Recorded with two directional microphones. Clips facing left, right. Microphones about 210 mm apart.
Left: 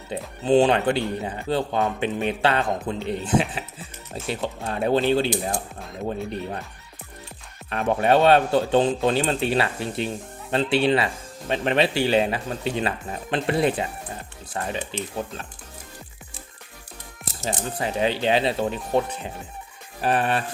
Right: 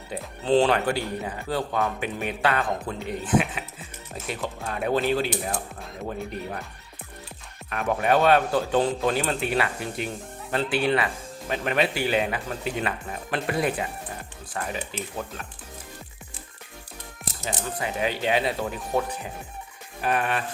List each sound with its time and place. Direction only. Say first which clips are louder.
0.1 s speech: left 3 dB; 15° left (ahead or behind)
7.7 s speech: left 3 dB; 30° left (ahead or behind)
17.4 s speech: left 3 dB; 30° left (ahead or behind)